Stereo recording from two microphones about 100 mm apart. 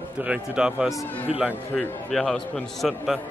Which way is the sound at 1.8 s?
5° left (ahead or behind).